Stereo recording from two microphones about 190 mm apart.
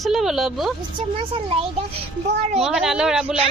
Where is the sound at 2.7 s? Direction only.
5° right (ahead or behind).